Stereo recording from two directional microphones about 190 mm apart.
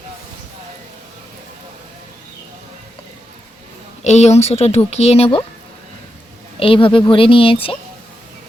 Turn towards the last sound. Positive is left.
turn(degrees=30)  # may be behind; listen again after turning